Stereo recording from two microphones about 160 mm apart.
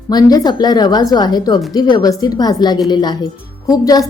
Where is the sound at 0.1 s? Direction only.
25° left (ahead or behind).